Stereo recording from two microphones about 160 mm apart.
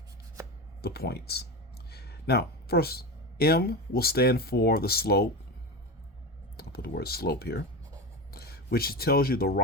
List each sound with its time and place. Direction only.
0.8 s speech: 80° left
6.6 s speech: 75° left (ahead or behind)